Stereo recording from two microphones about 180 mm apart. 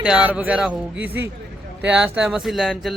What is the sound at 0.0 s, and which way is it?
Speech, 5° right (ahead or behind).